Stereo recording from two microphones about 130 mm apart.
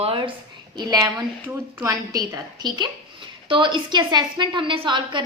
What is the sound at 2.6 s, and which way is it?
A woman's voice, 35° right (ahead or behind).